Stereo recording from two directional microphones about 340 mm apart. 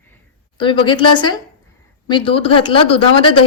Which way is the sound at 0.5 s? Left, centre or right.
Centre.